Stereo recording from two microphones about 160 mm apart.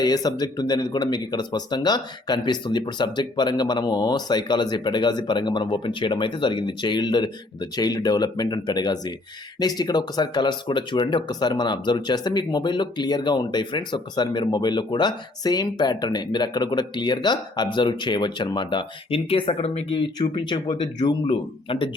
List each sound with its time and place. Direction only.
0.0 s speech: 25° left (ahead or behind)